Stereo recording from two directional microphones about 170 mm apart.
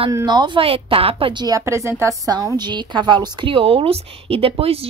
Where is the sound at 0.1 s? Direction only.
25° right (ahead or behind).